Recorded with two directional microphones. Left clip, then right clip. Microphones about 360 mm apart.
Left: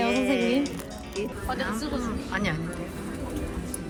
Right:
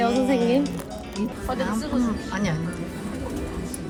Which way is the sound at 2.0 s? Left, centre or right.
Centre.